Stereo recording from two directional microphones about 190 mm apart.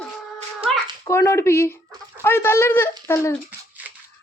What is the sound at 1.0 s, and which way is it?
Speech, 15° left (ahead or behind).